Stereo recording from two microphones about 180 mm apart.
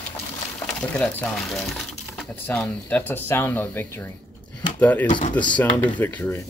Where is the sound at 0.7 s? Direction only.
5° left (ahead or behind).